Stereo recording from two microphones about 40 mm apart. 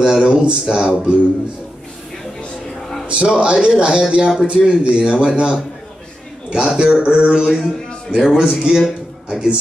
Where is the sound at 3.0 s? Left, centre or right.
Right.